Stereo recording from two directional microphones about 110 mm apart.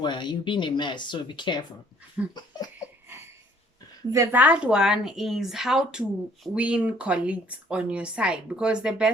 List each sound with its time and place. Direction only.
0.0 s speech: 45° left (ahead or behind)
2.2 s speech: 15° right (ahead or behind)
4.1 s a woman's voice: 25° right (ahead or behind)
4.4 s speech: 10° right (ahead or behind)